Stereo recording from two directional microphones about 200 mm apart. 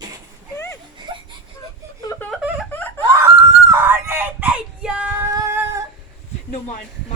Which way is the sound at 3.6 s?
10° right (ahead or behind).